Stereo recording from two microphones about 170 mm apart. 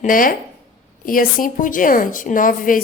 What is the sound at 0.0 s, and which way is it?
A woman's voice, 55° left (ahead or behind).